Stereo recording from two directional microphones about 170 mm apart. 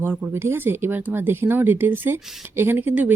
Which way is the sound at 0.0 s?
10° right (ahead or behind).